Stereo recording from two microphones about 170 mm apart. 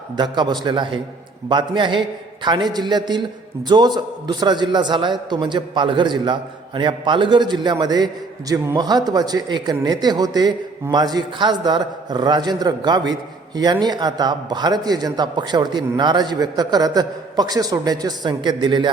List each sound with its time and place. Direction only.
0.2 s a man's voice: 25° right (ahead or behind)